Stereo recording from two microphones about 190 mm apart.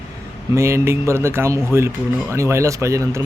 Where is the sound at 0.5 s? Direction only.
15° right (ahead or behind).